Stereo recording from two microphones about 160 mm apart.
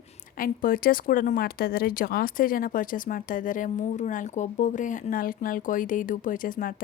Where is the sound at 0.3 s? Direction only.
60° left (ahead or behind).